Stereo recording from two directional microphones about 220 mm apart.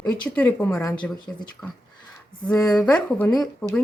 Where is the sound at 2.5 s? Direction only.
5° left (ahead or behind).